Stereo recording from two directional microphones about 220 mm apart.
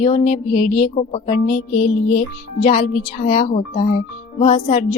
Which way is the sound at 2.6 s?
35° left (ahead or behind).